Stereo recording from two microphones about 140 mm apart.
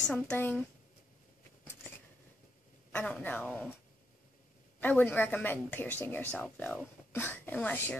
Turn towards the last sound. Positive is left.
turn(degrees=10)  # may be behind; listen again after turning